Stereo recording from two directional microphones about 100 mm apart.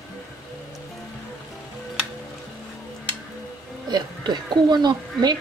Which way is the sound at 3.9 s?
45° right (ahead or behind).